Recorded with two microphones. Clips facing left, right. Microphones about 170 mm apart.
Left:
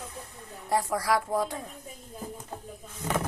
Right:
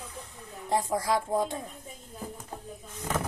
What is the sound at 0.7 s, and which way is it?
Speech, 20° right (ahead or behind).